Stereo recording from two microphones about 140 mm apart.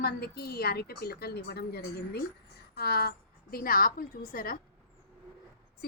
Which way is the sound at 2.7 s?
90° left.